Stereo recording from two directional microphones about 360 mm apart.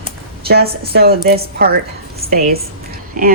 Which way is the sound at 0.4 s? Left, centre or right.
Right.